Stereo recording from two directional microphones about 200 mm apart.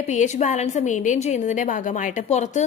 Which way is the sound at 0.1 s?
35° left (ahead or behind).